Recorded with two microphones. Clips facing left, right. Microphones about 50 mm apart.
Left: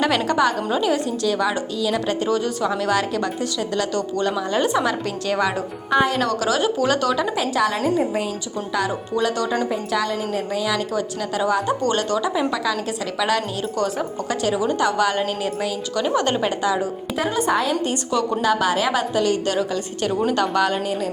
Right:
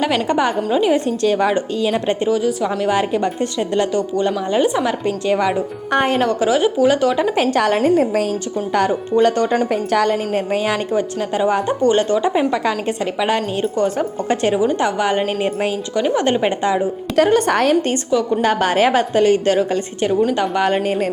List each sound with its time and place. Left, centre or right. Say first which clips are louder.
0.3 s a woman's voice: right 2 dB; right
0.9 s a woman's voice: right 5 dB; right
2.3 s a woman's voice: right 3 dB; centre
5.9 s a woman's voice: right 1 dB; right
6.1 s a woman's voice: right 4 dB; right
7.3 s a woman's voice: right 5 dB; right
9.2 s a woman's voice: right 5 dB; right
10.9 s a woman's voice: right 5 dB; right
14.8 s a woman's voice: right 2 dB; right
16.0 s a woman's voice: right 4 dB; right
17.2 s a woman's voice: right 7 dB; right
18.4 s a woman's voice: right 4 dB; right; by 20.7 s centre
20.7 s a woman's voice: right 5 dB; right